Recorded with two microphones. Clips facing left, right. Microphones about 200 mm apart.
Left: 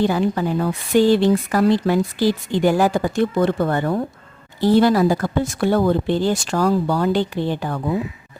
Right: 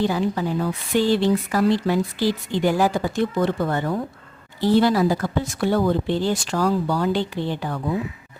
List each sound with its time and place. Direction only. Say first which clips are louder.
0.0 s speech: left 3 dB; 55° left (ahead or behind)